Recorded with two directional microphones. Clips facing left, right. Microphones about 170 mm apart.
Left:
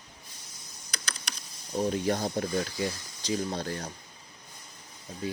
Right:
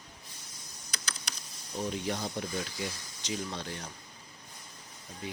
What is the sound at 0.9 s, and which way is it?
Computer keyboard, 65° left (ahead or behind).